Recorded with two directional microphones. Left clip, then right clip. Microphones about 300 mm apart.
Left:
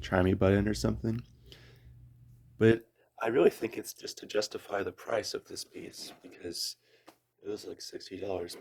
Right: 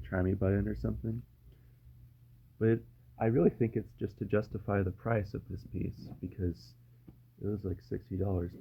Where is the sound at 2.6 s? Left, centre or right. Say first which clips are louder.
Left 6 dB; left.